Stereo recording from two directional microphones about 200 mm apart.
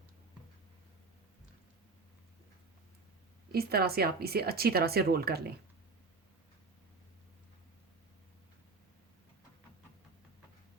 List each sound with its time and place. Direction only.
3.5 s speech: 50° right (ahead or behind)